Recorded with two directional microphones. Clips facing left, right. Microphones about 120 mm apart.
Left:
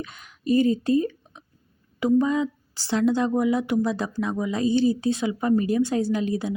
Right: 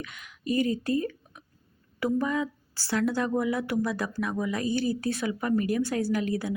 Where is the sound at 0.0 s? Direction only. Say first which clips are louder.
Left 5 dB; 30° left (ahead or behind).